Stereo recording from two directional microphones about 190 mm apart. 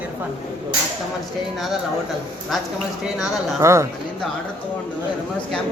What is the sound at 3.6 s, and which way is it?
Speech, 15° right (ahead or behind).